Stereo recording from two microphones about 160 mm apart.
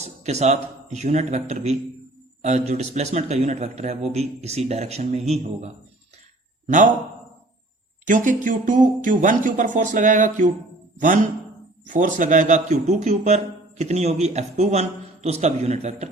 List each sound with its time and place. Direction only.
0.0 s a man's voice: 45° right (ahead or behind)
8.0 s a man's voice: 55° right (ahead or behind)